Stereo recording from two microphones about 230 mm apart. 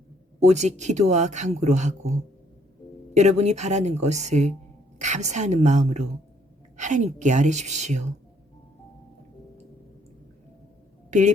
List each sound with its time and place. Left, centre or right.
0.3 s speech: right
3.2 s speech: right